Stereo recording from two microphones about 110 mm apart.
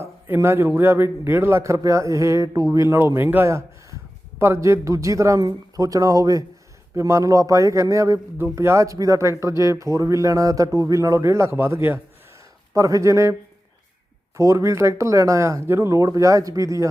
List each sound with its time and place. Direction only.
0.3 s a man's voice: 20° right (ahead or behind)
14.3 s a man's voice: 25° right (ahead or behind)